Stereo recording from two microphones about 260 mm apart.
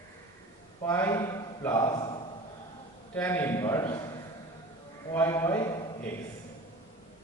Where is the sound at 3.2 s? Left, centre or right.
Centre.